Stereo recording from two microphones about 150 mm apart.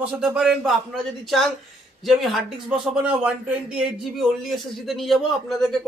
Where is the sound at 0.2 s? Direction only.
5° right (ahead or behind).